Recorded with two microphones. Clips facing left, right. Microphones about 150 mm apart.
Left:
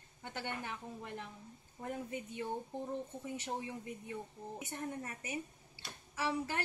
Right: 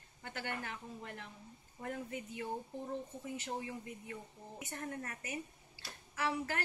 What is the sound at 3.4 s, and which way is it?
Speech, 20° left (ahead or behind).